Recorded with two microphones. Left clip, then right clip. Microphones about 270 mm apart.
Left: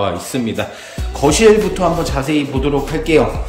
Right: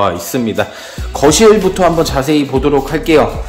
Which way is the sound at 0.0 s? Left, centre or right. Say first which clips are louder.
Right 5 dB; centre.